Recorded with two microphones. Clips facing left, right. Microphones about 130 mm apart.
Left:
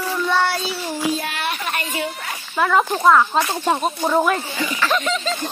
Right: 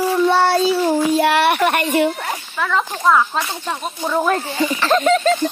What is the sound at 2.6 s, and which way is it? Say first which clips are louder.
Speech: left 3 dB; 5° left (ahead or behind).